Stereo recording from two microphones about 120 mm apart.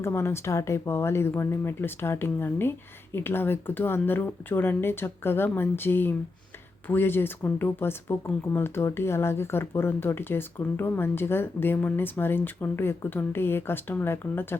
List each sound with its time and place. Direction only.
0.0 s speech: 20° left (ahead or behind)